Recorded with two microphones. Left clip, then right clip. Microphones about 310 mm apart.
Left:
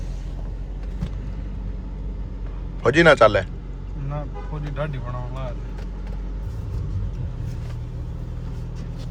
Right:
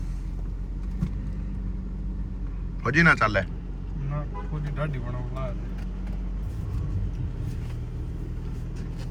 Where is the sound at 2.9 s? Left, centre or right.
Centre.